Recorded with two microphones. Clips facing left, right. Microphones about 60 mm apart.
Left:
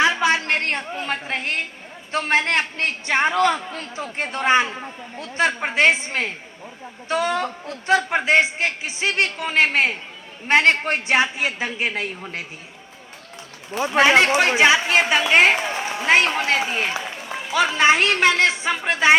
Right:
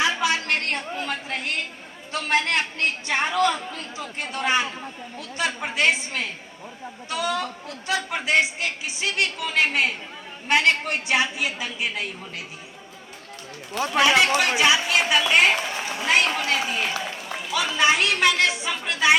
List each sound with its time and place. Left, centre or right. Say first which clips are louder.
0.0 s a sound: left 4 dB; left
0.9 s a woman's voice: left 3 dB; left
13.9 s a woman's voice: left 3 dB; left